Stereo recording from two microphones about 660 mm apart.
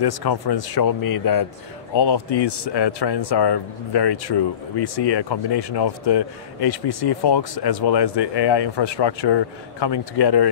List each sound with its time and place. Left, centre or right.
0.0 s speech: left